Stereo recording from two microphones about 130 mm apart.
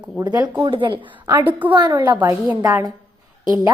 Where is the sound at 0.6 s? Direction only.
40° right (ahead or behind).